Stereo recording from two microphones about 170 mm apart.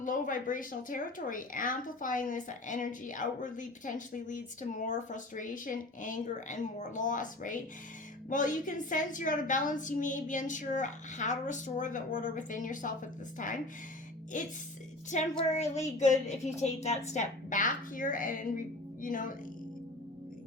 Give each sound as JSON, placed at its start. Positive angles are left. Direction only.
{"t": 0.0, "sound": "a woman's voice", "side_deg": 50}